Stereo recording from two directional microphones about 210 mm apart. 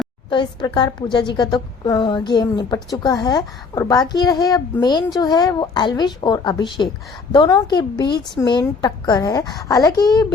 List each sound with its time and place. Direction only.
0.3 s a woman's voice: 20° left (ahead or behind)